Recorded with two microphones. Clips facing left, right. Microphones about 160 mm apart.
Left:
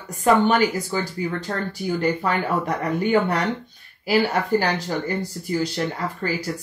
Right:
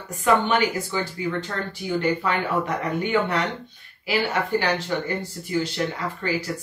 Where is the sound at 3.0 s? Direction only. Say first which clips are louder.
Left 3 dB; 40° left (ahead or behind).